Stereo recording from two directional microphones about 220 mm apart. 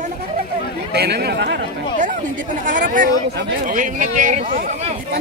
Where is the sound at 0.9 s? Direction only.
45° right (ahead or behind).